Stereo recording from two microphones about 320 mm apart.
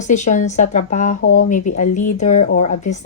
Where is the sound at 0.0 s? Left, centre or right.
Left.